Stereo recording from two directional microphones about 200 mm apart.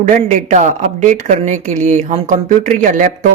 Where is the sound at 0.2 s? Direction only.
35° right (ahead or behind).